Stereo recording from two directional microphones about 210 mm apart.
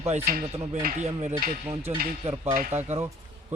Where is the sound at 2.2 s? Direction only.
35° right (ahead or behind).